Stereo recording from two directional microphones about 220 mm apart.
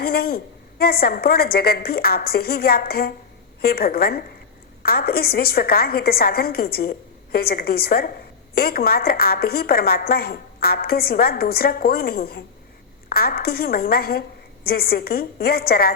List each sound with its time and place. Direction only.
0.0 s a woman's voice: 45° left (ahead or behind)